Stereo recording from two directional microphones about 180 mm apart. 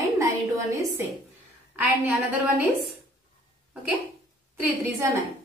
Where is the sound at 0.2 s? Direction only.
15° right (ahead or behind).